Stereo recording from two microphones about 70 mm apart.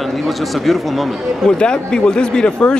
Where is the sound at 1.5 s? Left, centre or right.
Centre.